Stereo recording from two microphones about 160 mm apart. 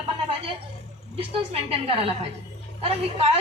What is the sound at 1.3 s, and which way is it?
Speech, 40° right (ahead or behind).